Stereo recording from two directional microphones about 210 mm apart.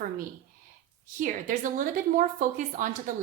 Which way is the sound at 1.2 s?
40° right (ahead or behind).